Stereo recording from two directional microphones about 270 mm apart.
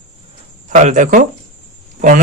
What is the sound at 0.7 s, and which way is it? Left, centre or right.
Speech, right.